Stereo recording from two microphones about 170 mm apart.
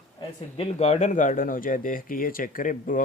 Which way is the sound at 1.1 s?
50° left (ahead or behind).